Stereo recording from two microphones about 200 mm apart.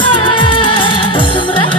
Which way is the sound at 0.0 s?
25° left (ahead or behind).